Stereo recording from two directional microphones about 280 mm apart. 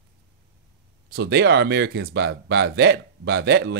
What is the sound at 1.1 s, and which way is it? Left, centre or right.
Speech, right.